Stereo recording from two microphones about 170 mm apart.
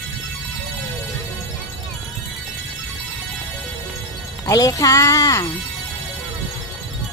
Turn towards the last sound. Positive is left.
turn(degrees=20)  # may be behind; listen again after turning